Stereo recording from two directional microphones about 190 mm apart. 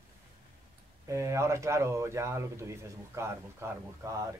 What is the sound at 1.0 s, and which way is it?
Speech, 15° right (ahead or behind).